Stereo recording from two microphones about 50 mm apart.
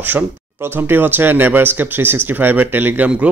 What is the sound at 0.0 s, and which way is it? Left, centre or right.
Speech, right.